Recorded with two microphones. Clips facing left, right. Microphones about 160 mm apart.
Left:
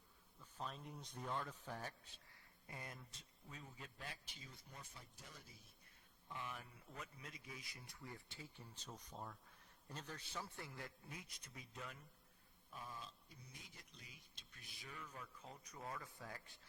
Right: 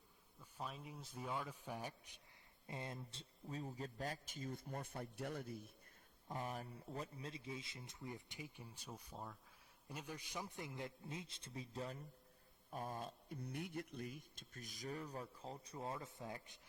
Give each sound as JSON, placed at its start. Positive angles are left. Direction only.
{"t": 0.3, "sound": "speech", "side_deg": -10}
{"t": 6.2, "sound": "a man's voice", "side_deg": -40}
{"t": 12.7, "sound": "speech", "side_deg": -50}